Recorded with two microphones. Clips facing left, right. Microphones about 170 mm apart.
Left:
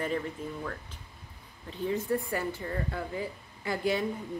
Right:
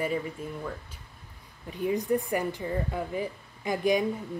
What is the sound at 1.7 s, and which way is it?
Speech, 15° right (ahead or behind).